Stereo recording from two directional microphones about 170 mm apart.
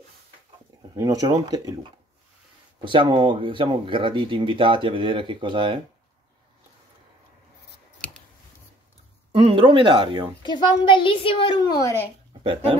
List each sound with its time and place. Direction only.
0.9 s speech: 20° right (ahead or behind)
9.3 s speech: 35° right (ahead or behind)
10.4 s a child's voice: 25° left (ahead or behind)